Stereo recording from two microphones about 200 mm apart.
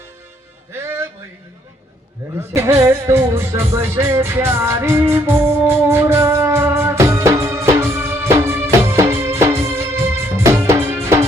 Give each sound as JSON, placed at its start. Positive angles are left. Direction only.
{"t": 0.7, "sound": "music", "side_deg": -10}
{"t": 2.4, "sound": "music", "side_deg": -10}